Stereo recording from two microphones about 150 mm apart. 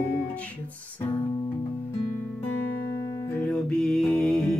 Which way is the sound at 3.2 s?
15° left (ahead or behind).